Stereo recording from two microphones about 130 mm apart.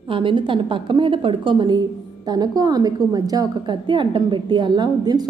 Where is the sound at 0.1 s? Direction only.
40° right (ahead or behind).